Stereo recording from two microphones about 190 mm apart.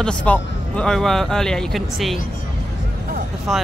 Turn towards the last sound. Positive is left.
turn(degrees=0)  # may be behind; listen again after turning